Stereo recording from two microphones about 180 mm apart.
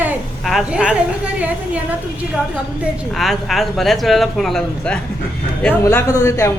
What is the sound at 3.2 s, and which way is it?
A man's voice, centre (ahead or behind).